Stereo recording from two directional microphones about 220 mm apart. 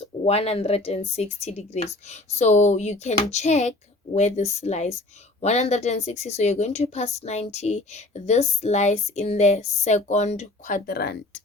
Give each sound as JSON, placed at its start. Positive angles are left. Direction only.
{"t": 0.3, "sound": "speech", "side_deg": 30}